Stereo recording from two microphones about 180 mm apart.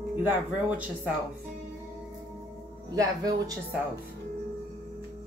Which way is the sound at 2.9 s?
20° right (ahead or behind).